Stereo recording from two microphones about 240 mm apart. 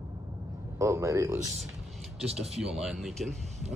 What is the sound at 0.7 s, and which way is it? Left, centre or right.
Speech, centre.